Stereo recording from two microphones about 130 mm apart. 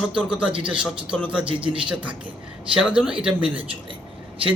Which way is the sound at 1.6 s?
40° right (ahead or behind).